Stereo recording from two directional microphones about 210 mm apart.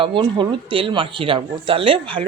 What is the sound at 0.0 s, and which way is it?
Speech, 25° right (ahead or behind).